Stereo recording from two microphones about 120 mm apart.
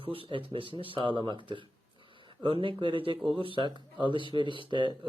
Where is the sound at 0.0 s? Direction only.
50° right (ahead or behind).